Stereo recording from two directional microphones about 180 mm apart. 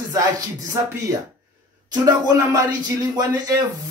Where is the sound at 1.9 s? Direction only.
20° right (ahead or behind).